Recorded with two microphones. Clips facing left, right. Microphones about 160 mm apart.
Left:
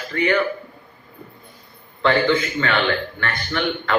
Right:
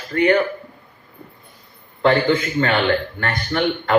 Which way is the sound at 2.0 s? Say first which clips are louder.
Right 2 dB; 40° right (ahead or behind).